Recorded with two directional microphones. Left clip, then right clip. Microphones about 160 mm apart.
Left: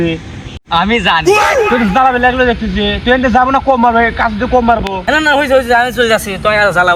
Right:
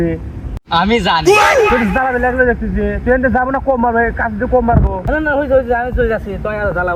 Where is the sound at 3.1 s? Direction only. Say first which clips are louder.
Left 6 dB; 40° left (ahead or behind).